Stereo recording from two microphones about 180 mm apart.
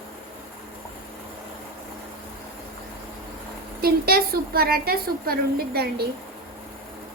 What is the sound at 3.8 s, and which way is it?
A woman's voice, 55° right (ahead or behind).